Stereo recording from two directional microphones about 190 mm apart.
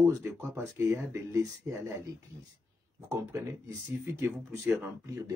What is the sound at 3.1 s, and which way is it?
Speech, 15° right (ahead or behind).